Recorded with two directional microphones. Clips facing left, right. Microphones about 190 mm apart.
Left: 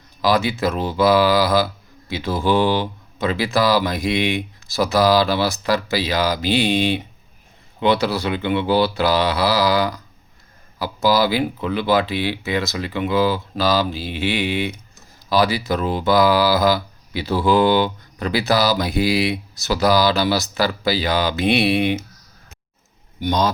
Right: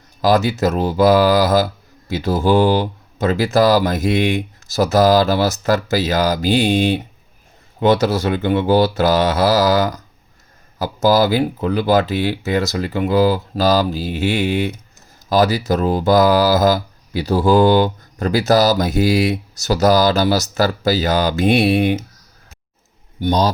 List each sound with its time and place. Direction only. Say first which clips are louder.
0.2 s speech: right 3 dB; 45° right (ahead or behind)
23.2 s a man's voice: right 3 dB; 35° right (ahead or behind)